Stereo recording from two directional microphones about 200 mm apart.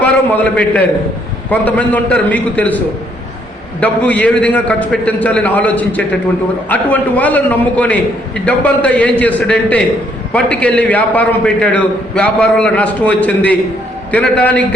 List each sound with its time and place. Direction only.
0.5 s a man's voice: 5° left (ahead or behind)